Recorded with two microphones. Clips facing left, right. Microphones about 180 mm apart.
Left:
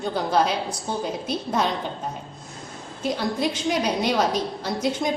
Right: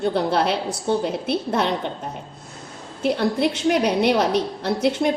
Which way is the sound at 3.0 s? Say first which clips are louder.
Right 4 dB; 65° right (ahead or behind).